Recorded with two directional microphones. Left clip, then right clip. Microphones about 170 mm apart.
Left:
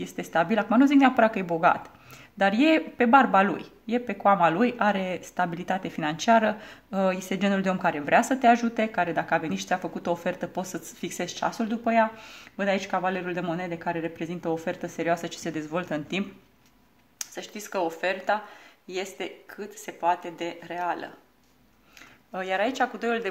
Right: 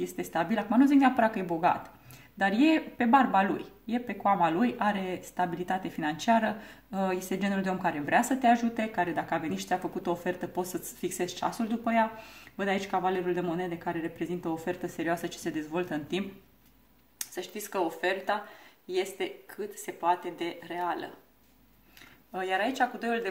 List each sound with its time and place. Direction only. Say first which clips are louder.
0.0 s speech: left 5 dB; 40° left (ahead or behind)
22.3 s speech: left 3 dB; 45° left (ahead or behind)